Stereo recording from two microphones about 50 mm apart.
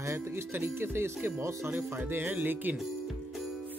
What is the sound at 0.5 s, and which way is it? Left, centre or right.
Speech, right.